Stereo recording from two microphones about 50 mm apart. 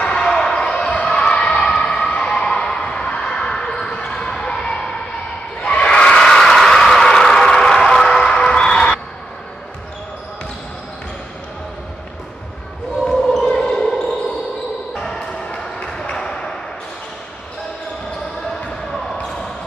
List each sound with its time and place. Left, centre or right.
0.0 s basketball bounce: centre
1.3 s a sound: centre
2.0 s basketball bounce: centre
5.6 s crowd: left
6.2 s a sound: centre
8.3 s music: centre
13.0 s basketball bounce: centre
15.0 s ping: centre